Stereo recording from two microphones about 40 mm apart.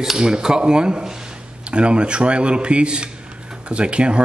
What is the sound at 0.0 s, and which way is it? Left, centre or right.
Speech, centre.